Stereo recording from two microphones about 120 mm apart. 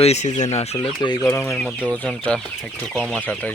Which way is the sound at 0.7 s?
35° left (ahead or behind).